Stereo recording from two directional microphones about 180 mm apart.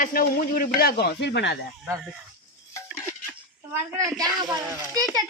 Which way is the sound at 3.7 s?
15° right (ahead or behind).